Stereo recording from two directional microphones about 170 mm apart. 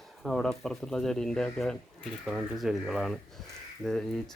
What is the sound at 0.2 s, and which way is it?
Speech, 5° left (ahead or behind).